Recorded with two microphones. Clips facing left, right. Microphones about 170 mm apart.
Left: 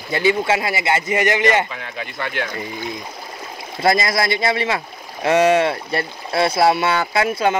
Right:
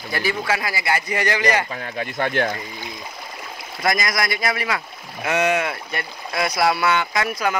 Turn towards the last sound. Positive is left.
turn(degrees=25)  # may be behind; listen again after turning